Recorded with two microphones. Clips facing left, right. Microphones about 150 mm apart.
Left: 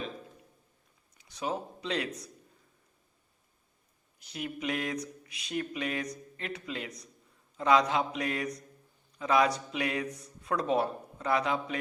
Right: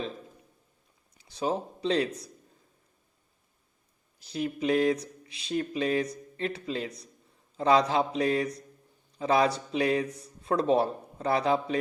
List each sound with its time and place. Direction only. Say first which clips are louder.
1.2 s speech: right 5 dB; 30° right (ahead or behind)
4.2 s speech: right 6 dB; 35° right (ahead or behind)